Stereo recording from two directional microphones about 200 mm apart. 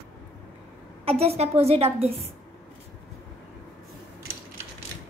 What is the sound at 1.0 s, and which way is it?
A child's voice, 30° right (ahead or behind).